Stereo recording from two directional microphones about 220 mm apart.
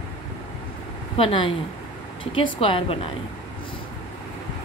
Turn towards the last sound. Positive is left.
turn(degrees=25)  # may be behind; listen again after turning